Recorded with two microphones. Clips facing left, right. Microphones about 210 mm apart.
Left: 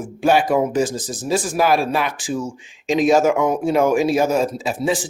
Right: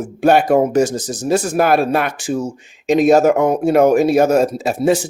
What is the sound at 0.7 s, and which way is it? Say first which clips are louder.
Speech: right 5 dB; 70° right (ahead or behind).